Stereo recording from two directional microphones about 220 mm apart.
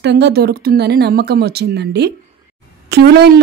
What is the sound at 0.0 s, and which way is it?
A woman's voice, 50° right (ahead or behind).